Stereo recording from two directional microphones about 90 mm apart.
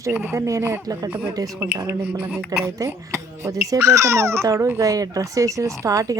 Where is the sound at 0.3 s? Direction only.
35° right (ahead or behind).